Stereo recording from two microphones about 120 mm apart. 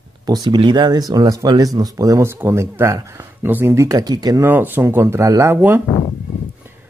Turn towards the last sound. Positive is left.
turn(degrees=-20)  # may be behind; listen again after turning